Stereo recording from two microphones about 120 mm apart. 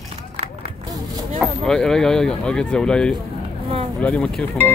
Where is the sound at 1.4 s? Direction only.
5° left (ahead or behind).